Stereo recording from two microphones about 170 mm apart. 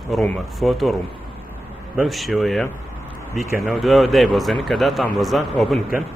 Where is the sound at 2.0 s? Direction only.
Centre (ahead or behind).